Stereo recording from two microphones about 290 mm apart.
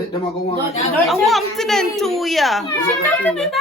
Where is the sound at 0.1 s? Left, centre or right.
Centre.